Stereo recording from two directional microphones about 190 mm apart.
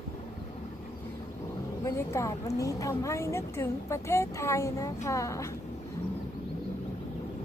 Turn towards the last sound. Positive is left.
turn(degrees=15)  # may be behind; listen again after turning